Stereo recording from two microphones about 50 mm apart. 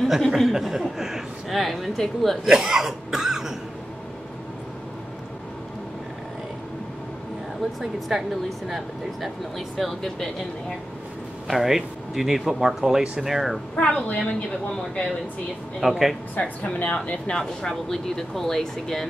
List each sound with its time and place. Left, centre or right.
0.0 s speech: centre
2.4 s cough: centre
7.8 s speech: centre
11.4 s speech: centre
13.7 s a woman's voice: left
15.8 s speech: centre
16.4 s speech: left; by 19.0 s centre